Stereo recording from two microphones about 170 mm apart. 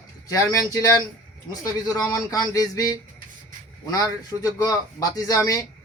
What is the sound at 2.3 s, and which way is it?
Speech, 20° left (ahead or behind).